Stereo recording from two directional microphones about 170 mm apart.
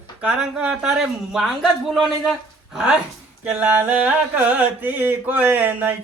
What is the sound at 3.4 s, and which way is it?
Mantra, 10° right (ahead or behind).